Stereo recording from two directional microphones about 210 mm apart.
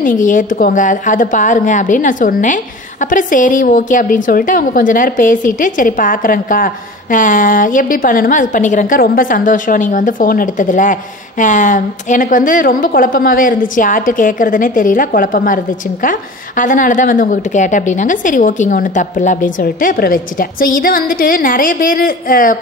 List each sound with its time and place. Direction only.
0.0 s a woman's voice: 40° left (ahead or behind)